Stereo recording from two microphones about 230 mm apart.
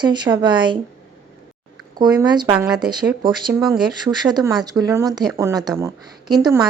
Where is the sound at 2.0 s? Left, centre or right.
Centre.